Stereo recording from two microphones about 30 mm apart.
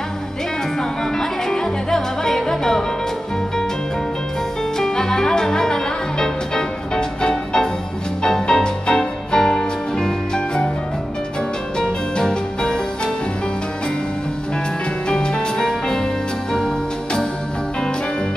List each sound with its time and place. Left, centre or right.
0.7 s music: centre
4.7 s music: centre
12.2 s music: left
15.0 s music: left